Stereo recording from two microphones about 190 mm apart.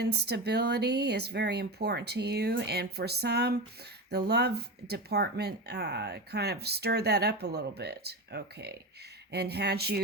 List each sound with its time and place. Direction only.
0.0 s speech: 60° right (ahead or behind)